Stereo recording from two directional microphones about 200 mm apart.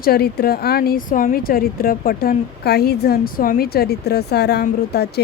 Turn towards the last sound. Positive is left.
turn(degrees=55)  # may be behind; listen again after turning